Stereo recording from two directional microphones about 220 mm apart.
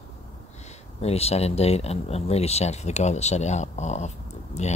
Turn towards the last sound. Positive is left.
turn(degrees=30)  # may be behind; listen again after turning